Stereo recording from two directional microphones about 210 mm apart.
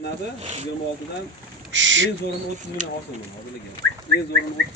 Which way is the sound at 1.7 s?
60° right (ahead or behind).